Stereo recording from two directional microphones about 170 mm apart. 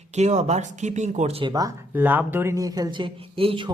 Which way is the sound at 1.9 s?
10° right (ahead or behind).